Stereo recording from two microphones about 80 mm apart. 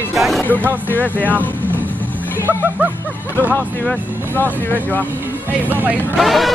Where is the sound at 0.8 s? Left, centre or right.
Left.